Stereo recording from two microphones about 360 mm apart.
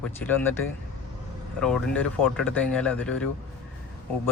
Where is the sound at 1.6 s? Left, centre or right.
Centre.